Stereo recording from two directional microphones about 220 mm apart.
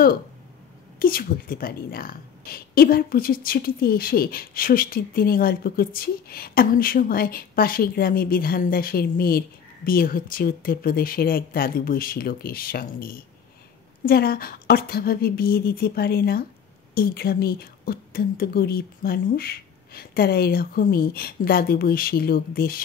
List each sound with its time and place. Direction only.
0.9 s a woman's voice: 40° left (ahead or behind)